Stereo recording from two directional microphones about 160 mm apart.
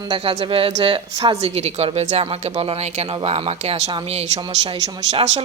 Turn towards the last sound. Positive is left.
turn(degrees=-40)  # may be behind; listen again after turning